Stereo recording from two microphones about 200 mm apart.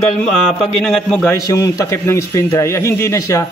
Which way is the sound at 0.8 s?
5° left (ahead or behind).